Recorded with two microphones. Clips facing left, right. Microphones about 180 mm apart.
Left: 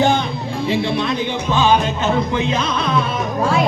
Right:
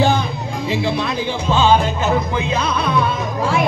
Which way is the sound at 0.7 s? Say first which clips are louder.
Left 1 dB; 30° left (ahead or behind).